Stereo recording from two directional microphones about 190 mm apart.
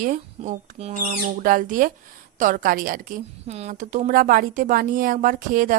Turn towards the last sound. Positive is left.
turn(degrees=-45)  # may be behind; listen again after turning